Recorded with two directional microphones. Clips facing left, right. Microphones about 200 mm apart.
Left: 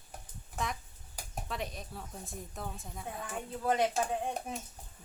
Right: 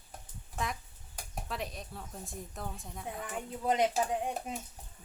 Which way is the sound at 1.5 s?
Centre (ahead or behind).